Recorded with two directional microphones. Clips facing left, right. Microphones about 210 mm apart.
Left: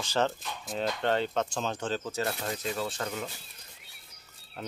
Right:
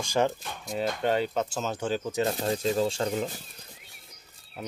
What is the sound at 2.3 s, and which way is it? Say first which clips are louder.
Speech: right 7 dB; 30° right (ahead or behind).